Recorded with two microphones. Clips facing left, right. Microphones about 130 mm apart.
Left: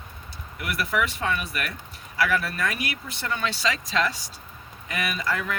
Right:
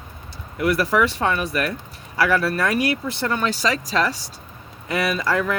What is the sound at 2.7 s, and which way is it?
Speech, 35° right (ahead or behind).